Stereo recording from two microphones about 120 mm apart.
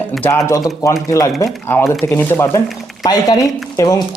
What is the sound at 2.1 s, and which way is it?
Speech, 15° left (ahead or behind).